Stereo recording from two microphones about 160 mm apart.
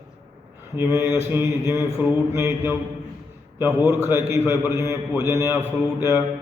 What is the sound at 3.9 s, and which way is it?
Mantra, 15° right (ahead or behind).